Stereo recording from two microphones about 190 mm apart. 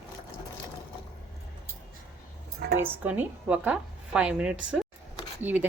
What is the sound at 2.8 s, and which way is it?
Speech, 10° right (ahead or behind).